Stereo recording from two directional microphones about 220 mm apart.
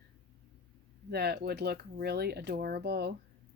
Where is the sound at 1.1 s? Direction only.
45° right (ahead or behind).